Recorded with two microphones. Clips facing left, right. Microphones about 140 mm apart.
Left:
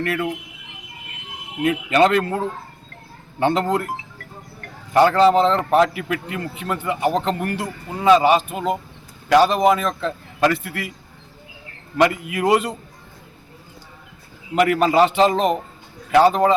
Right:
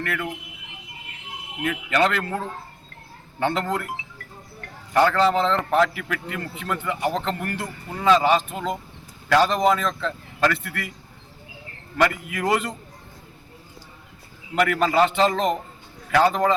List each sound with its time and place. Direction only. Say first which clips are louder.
0.0 s a man's voice: left 5 dB; 20° left (ahead or behind)
1.6 s a man's voice: left 5 dB; 20° left (ahead or behind)
4.9 s a man's voice: left 5 dB; 20° left (ahead or behind)
11.9 s a man's voice: left 4 dB; 20° left (ahead or behind)
14.5 s a man's voice: left 4 dB; 20° left (ahead or behind)